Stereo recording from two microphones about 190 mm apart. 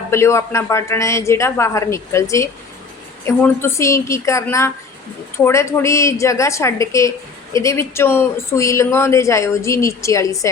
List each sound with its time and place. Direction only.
0.1 s speech: 15° left (ahead or behind)